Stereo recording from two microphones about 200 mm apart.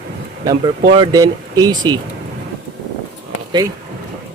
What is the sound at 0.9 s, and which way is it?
Speech, 20° right (ahead or behind).